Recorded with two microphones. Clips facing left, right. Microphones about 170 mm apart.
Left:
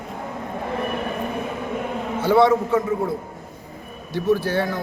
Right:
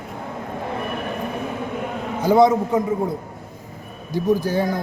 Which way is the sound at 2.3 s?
15° right (ahead or behind).